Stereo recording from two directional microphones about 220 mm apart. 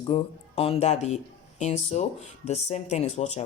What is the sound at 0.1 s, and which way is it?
Speech, 25° left (ahead or behind).